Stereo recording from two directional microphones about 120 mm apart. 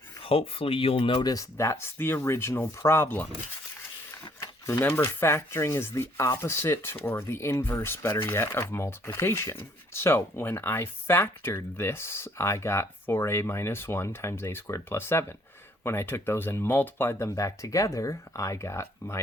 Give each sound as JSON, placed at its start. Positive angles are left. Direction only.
{"t": 0.2, "sound": "speech", "side_deg": 50}
{"t": 1.3, "sound": "speech", "side_deg": 25}
{"t": 4.6, "sound": "speech", "side_deg": 20}